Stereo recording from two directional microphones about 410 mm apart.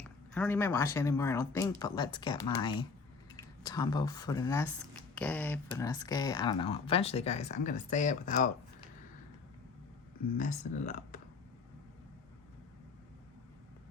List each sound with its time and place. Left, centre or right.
0.0 s speech: centre
10.3 s speech: centre